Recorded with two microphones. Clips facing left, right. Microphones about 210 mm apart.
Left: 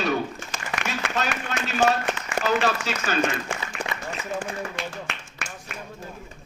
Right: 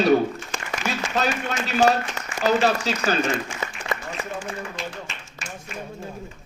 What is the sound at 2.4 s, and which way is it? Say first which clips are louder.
Speech: right 4 dB; 35° right (ahead or behind).